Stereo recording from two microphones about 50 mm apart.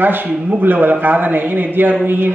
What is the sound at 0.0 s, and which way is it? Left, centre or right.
A man's voice, right.